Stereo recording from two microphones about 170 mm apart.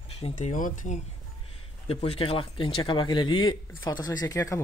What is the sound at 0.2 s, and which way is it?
Speech, 45° left (ahead or behind).